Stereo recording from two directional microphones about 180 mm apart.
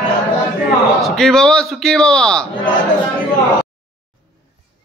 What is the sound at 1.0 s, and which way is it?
A man's voice, centre (ahead or behind).